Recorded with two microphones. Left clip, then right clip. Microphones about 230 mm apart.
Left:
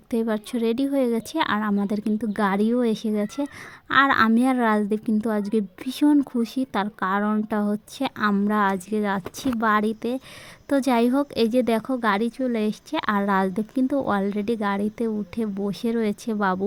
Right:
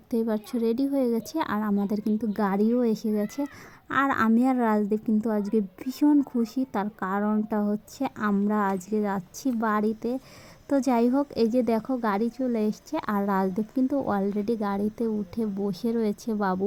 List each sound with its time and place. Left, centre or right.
0.1 s a woman's voice: left